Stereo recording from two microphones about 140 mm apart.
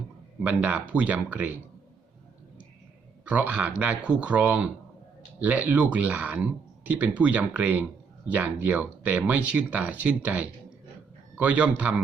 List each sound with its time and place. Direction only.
0.4 s speech: 10° right (ahead or behind)
3.2 s speech: 10° right (ahead or behind)